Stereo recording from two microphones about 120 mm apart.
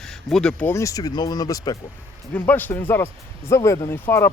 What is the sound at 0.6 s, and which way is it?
Speech, 25° left (ahead or behind).